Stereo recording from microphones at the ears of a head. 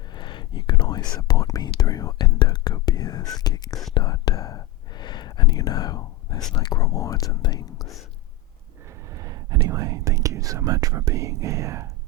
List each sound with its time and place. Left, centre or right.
0.1 s whispering: left
9.1 s whispering: right